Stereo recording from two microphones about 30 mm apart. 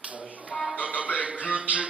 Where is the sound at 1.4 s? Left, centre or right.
Right.